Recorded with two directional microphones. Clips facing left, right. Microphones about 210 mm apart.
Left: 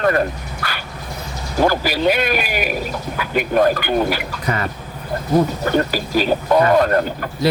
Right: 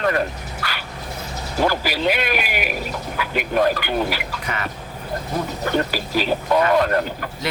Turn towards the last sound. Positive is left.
turn(degrees=40)  # may be behind; listen again after turning